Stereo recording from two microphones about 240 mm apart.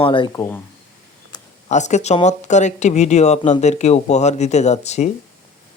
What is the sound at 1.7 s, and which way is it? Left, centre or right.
Speech, left.